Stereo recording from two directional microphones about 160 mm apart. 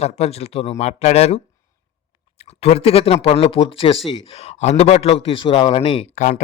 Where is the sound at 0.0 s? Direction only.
40° left (ahead or behind).